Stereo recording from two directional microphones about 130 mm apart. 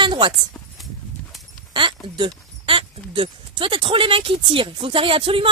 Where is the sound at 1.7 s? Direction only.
40° right (ahead or behind).